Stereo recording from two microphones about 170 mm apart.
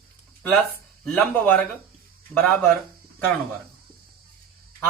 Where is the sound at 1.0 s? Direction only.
5° left (ahead or behind).